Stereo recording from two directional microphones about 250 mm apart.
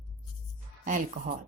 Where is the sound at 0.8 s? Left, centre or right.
Right.